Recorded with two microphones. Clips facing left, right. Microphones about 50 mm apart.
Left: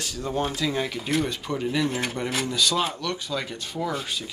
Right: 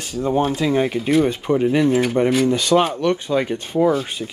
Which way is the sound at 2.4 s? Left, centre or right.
Right.